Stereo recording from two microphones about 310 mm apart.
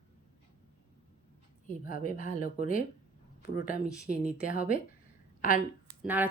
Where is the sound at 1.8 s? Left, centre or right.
Left.